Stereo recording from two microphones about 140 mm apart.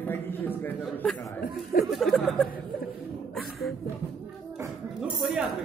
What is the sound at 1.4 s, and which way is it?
Speech, 90° left.